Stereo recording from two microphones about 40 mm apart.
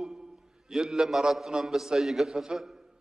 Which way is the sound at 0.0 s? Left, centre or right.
Centre.